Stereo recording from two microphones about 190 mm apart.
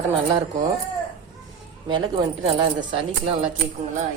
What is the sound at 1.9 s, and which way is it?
Speech, 25° right (ahead or behind).